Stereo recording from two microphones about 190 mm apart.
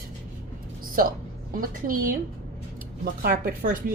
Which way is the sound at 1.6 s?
50° right (ahead or behind).